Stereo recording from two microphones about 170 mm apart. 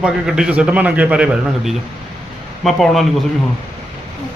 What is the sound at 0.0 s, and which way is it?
A man's voice, 5° right (ahead or behind).